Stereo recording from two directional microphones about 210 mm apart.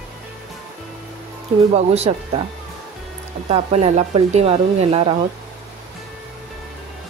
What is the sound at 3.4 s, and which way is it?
Speech, 30° right (ahead or behind).